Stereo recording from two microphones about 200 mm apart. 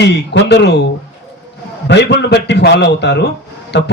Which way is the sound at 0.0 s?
60° left (ahead or behind).